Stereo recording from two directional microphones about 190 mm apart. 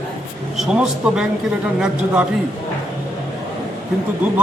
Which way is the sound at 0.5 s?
5° right (ahead or behind).